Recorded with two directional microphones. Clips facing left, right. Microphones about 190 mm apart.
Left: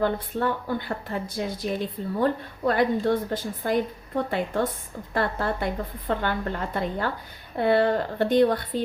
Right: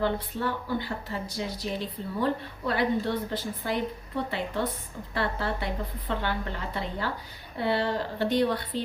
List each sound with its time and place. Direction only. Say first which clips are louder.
0.0 s a woman's voice: left 3 dB; 50° left (ahead or behind)